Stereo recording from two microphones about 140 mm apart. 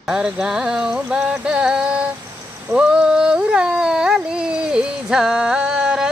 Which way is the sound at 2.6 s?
10° right (ahead or behind).